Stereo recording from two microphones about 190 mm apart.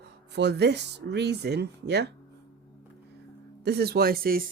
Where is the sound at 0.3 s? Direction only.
60° right (ahead or behind).